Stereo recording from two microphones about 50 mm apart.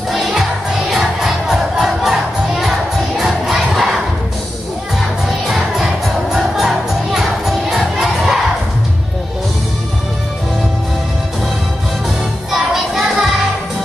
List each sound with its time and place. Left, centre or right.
0.1 s music: centre
3.4 s crowd: centre
6.3 s music: centre
12.4 s music: centre